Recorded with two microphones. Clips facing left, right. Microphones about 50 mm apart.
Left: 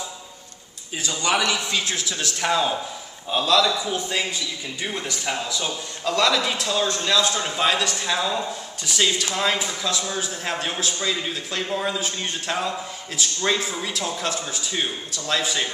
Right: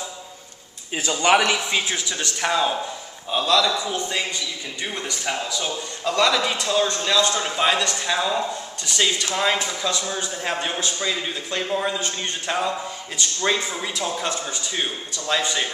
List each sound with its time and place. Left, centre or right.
1.2 s a man's voice: right
1.9 s a man's voice: centre
13.7 s a man's voice: centre